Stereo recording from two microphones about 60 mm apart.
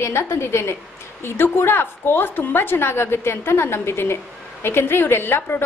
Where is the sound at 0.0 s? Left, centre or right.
Left.